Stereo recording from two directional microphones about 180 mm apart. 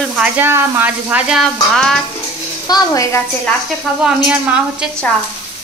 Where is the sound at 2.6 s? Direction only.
20° left (ahead or behind).